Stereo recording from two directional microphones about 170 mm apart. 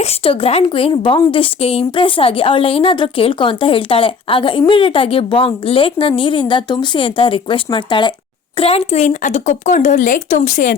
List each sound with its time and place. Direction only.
0.0 s a woman's voice: 35° left (ahead or behind)